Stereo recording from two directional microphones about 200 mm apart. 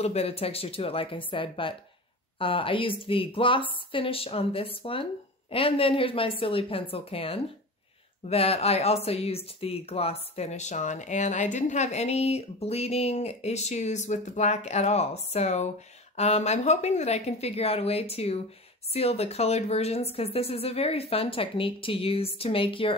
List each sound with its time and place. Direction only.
0.0 s a woman's voice: 30° left (ahead or behind)